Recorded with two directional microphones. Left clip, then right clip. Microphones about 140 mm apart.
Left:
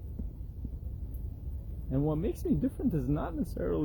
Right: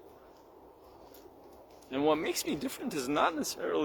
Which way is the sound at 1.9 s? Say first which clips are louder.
Right 4 dB; 25° right (ahead or behind).